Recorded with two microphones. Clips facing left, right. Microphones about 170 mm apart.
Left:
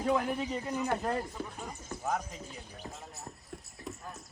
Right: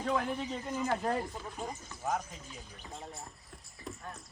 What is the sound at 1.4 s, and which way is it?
Speech, 55° left (ahead or behind).